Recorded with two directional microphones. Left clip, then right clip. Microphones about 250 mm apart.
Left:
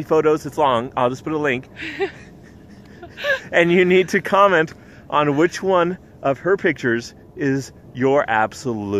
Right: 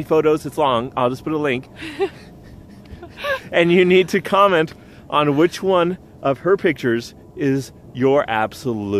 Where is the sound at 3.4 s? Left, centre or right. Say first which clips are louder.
Right 1 dB; centre.